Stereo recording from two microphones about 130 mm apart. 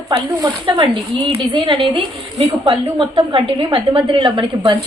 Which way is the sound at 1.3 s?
40° right (ahead or behind).